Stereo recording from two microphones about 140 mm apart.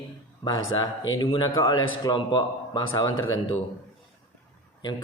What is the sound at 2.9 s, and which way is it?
Speech, 20° left (ahead or behind).